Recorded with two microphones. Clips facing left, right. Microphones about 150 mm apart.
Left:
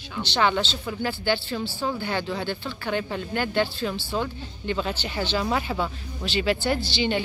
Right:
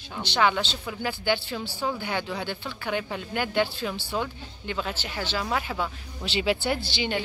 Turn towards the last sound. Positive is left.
turn(degrees=-55)  # may be behind; listen again after turning